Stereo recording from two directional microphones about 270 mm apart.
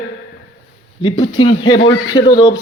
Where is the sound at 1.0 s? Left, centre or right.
Centre.